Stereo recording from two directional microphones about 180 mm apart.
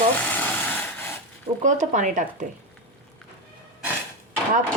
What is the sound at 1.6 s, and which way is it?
Speech, 45° right (ahead or behind).